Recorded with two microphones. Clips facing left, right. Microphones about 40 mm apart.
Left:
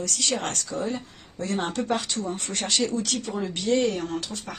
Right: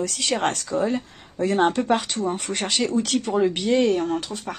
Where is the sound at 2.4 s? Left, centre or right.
Right.